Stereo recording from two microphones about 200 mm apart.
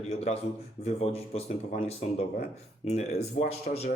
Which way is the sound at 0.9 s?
30° left (ahead or behind).